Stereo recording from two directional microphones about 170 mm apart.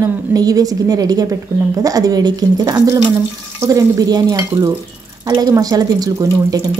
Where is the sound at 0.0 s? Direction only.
20° right (ahead or behind).